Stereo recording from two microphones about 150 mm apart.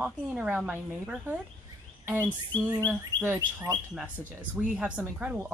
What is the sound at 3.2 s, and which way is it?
Speech, 20° right (ahead or behind).